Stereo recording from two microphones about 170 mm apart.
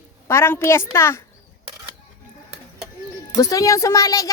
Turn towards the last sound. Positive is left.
turn(degrees=20)  # may be behind; listen again after turning